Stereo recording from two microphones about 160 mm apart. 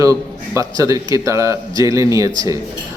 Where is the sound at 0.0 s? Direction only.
20° right (ahead or behind).